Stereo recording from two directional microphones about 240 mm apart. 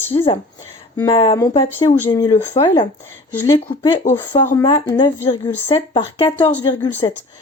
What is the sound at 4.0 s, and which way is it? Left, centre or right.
Speech, centre.